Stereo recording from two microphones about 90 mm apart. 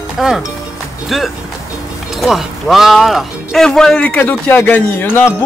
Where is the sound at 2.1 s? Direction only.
Centre (ahead or behind).